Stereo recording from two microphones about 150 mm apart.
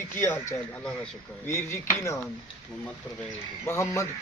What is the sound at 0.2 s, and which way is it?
Speech, 20° left (ahead or behind).